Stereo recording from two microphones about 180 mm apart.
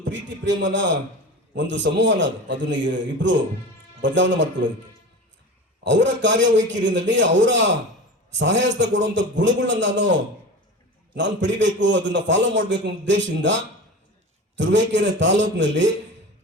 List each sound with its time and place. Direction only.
0.0 s a man's voice: 85° right
5.8 s a man's voice: 80° right